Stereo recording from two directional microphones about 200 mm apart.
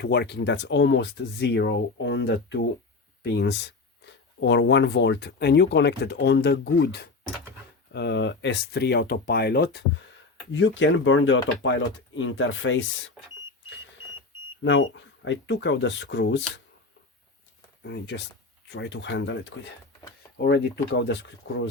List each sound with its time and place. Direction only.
0.0 s speech: 55° left (ahead or behind)
10.5 s speech: 65° left (ahead or behind)
14.6 s speech: 65° left (ahead or behind)
17.8 s speech: 60° left (ahead or behind)
20.4 s speech: 60° left (ahead or behind)